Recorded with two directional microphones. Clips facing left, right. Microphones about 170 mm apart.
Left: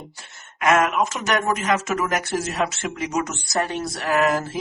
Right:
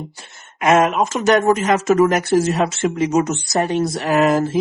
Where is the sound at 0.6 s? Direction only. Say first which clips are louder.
Right 4 dB; 25° right (ahead or behind).